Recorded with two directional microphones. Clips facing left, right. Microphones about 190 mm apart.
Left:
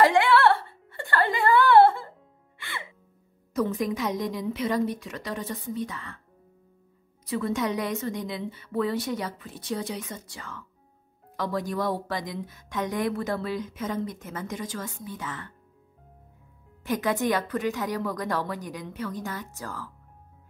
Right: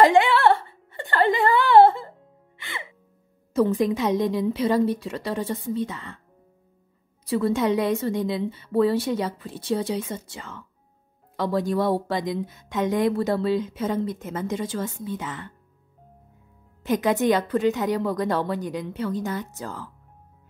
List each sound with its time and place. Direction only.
0.0 s a sound: 20° right (ahead or behind)
2.5 s music: 20° right (ahead or behind)
3.5 s speech: 30° right (ahead or behind)
7.2 s speech: 35° right (ahead or behind)
16.8 s speech: 20° right (ahead or behind)